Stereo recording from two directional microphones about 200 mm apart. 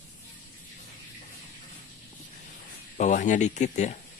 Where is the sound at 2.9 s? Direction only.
40° left (ahead or behind).